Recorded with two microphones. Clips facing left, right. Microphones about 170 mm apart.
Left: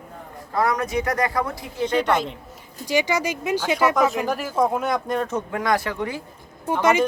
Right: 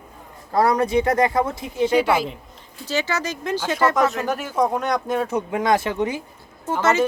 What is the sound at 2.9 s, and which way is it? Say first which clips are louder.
Speech: left 3 dB; 15° left (ahead or behind).